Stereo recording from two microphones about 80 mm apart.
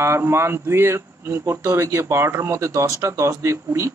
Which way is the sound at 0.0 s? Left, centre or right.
Right.